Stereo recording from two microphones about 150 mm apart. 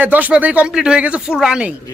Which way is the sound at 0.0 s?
10° right (ahead or behind).